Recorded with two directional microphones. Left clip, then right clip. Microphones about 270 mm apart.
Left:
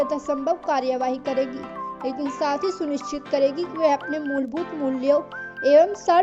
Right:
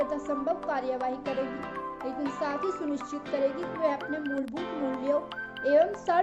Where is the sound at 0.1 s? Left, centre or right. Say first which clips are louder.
Left 6 dB; left.